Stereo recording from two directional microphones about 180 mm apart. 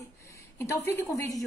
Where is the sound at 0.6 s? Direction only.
15° left (ahead or behind).